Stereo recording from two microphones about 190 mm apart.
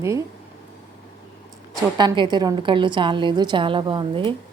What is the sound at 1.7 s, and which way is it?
A woman's voice, 20° right (ahead or behind).